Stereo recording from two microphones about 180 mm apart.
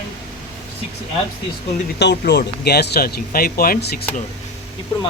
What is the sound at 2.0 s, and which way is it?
Speech, 70° left (ahead or behind).